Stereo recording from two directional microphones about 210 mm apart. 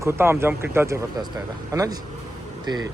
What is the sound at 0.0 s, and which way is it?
Speech, 10° right (ahead or behind).